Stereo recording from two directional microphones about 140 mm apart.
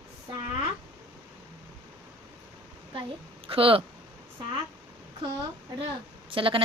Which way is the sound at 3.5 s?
40° right (ahead or behind).